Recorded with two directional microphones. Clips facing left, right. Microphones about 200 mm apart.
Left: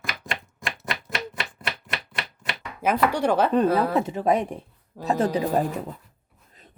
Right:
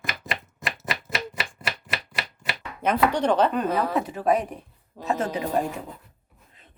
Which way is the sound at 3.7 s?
10° left (ahead or behind).